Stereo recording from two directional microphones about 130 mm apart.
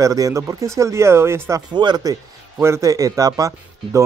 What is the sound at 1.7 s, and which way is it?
Speech, 35° right (ahead or behind).